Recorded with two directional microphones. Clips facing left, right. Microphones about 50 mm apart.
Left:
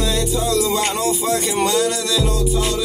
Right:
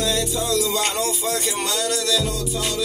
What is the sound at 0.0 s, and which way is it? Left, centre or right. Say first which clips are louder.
Music: left 3 dB; centre.